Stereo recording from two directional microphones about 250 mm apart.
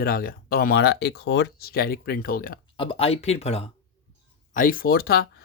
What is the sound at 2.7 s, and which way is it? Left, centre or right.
Speech, left.